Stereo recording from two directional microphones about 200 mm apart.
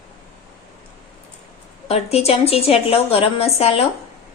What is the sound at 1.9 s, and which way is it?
A woman's voice, 30° left (ahead or behind).